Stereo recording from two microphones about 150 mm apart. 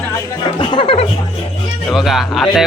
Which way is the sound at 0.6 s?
30° left (ahead or behind).